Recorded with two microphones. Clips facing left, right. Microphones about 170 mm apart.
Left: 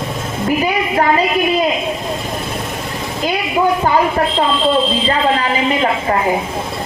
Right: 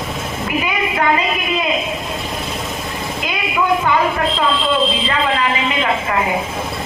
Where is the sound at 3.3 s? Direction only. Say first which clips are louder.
Left 3 dB; 35° left (ahead or behind).